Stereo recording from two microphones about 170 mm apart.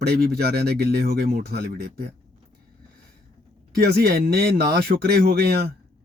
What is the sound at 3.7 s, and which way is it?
Speech, 65° right (ahead or behind).